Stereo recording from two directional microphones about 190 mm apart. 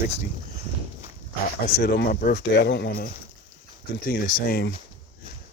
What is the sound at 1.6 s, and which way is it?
Speech, 50° left (ahead or behind).